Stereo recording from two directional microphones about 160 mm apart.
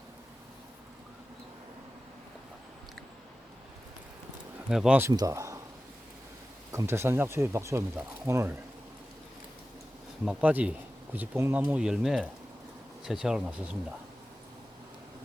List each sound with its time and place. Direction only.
4.7 s speech: 5° right (ahead or behind)
4.9 s speech: 20° right (ahead or behind)
6.7 s speech: 15° right (ahead or behind)
10.2 s speech: 10° right (ahead or behind)